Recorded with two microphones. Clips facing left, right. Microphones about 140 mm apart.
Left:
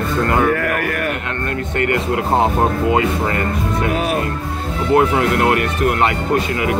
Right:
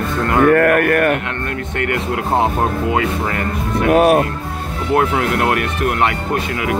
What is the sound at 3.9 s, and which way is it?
Speech, 55° right (ahead or behind).